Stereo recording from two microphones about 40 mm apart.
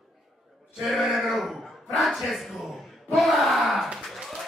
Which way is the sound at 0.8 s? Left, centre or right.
Centre.